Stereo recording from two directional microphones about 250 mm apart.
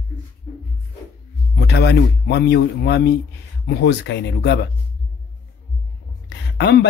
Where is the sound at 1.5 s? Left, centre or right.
Left.